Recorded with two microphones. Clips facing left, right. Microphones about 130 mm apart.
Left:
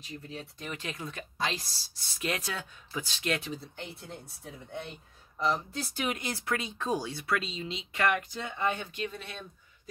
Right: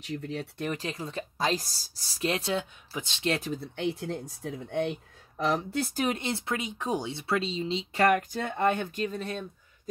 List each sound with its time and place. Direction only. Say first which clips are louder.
0.0 s speech: right 8 dB; 75° right (ahead or behind)
0.7 s speech: right 3 dB; 35° right (ahead or behind)
3.3 s speech: right 4 dB; 40° right (ahead or behind)
3.6 s speech: right 12 dB; 80° right
5.4 s speech: right 3 dB; 65° right (ahead or behind)
5.9 s speech: right 2 dB; 30° right (ahead or behind)